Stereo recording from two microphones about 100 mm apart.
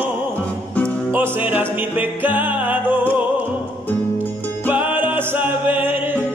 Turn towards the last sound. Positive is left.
turn(degrees=-20)  # may be behind; listen again after turning